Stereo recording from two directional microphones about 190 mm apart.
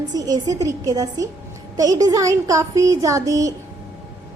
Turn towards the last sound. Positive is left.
turn(degrees=-15)  # may be behind; listen again after turning